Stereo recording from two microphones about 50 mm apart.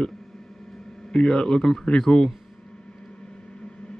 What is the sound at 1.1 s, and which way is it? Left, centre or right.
A man's voice, centre.